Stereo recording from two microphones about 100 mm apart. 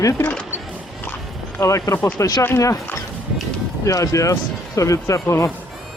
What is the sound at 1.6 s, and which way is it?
Speech, 30° left (ahead or behind).